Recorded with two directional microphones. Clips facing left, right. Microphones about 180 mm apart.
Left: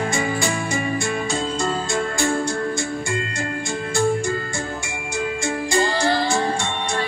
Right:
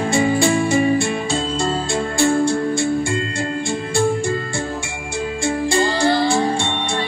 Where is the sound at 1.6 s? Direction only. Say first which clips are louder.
Right 2 dB; 30° right (ahead or behind).